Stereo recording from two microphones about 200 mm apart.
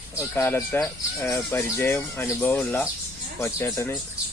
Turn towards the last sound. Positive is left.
turn(degrees=10)  # may be behind; listen again after turning